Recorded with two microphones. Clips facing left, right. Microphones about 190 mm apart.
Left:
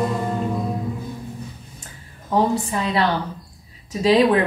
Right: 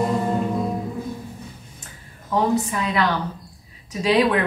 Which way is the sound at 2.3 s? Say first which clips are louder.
Left 1 dB; 30° left (ahead or behind).